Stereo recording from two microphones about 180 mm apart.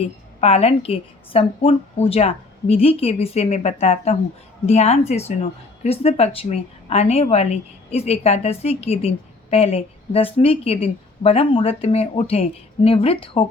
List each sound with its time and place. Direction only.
0.0 s a woman's voice: 35° left (ahead or behind)